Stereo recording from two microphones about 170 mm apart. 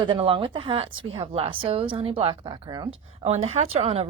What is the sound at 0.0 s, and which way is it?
Speech, 30° right (ahead or behind).